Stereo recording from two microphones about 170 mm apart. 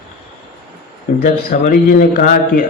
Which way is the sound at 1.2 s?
50° left (ahead or behind).